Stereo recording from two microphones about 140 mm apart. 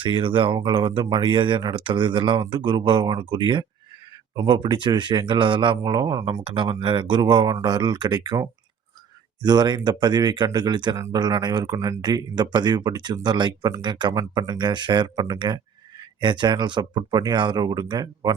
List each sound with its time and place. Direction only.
0.0 s speech: 35° right (ahead or behind)